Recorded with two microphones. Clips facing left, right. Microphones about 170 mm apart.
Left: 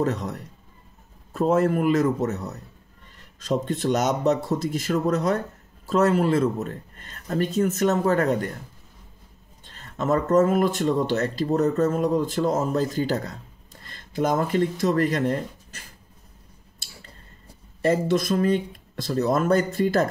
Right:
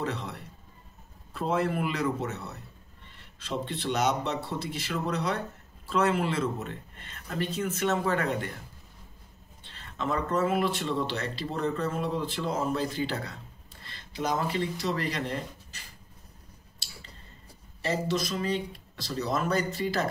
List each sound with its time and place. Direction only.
0.0 s speech: 45° left (ahead or behind)
9.7 s speech: 45° left (ahead or behind)
17.8 s speech: 50° left (ahead or behind)